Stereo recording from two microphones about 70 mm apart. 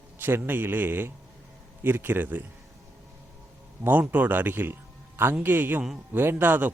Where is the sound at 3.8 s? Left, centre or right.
Right.